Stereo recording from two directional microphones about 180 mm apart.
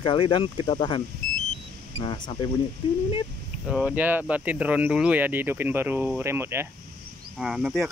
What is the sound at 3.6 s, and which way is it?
Speech, 5° right (ahead or behind).